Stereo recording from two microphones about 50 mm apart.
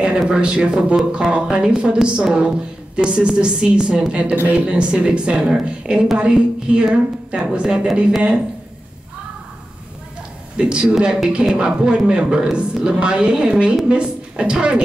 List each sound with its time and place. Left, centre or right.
0.0 s a man's voice: centre
10.6 s a man's voice: centre